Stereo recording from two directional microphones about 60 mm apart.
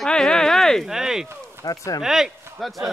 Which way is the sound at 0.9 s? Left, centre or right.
Centre.